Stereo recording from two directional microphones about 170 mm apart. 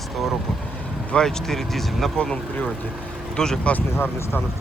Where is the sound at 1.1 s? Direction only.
5° left (ahead or behind).